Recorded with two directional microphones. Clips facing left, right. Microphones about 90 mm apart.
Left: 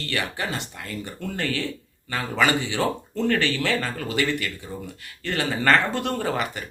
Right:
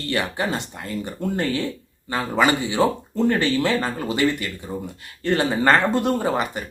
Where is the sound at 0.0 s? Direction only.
25° right (ahead or behind).